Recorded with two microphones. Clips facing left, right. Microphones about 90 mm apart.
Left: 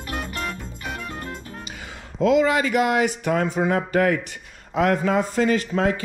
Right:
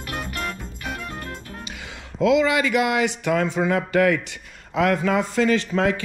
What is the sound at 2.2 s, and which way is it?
Speech, 45° left (ahead or behind).